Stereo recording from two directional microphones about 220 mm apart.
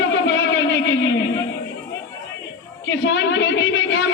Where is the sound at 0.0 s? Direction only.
55° left (ahead or behind).